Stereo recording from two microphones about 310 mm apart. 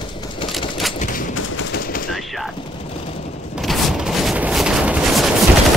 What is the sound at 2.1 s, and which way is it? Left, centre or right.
Fusillade, centre.